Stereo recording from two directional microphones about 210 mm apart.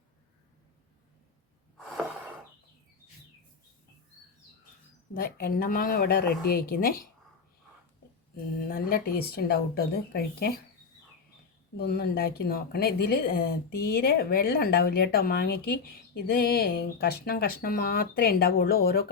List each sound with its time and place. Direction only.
1.9 s a sound: 5° right (ahead or behind)
5.1 s speech: 45° left (ahead or behind)
8.6 s speech: 45° left (ahead or behind)
11.8 s speech: 50° left (ahead or behind)